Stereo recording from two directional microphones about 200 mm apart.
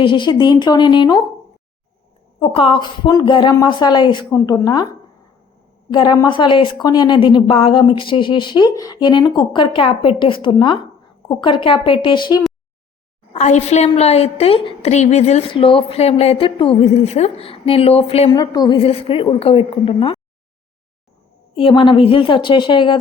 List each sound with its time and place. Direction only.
0.0 s a woman's voice: 25° left (ahead or behind)
2.4 s a woman's voice: 25° left (ahead or behind)
13.3 s a woman's voice: 35° left (ahead or behind)
18.3 s a woman's voice: 20° left (ahead or behind)
18.8 s a woman's voice: 30° left (ahead or behind)
21.5 s a woman's voice: 25° left (ahead or behind)